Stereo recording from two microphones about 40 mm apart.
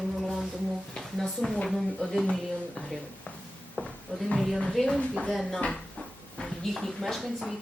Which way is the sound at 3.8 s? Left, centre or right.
Left.